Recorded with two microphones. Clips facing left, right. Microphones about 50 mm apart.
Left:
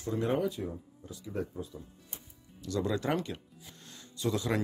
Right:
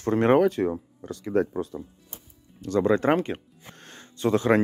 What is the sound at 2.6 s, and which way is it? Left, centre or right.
Speech, right.